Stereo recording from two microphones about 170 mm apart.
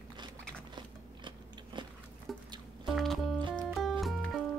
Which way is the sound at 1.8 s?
30° right (ahead or behind).